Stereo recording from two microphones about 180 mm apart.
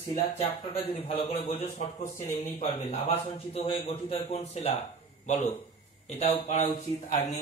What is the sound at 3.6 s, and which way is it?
A man's voice, 30° left (ahead or behind).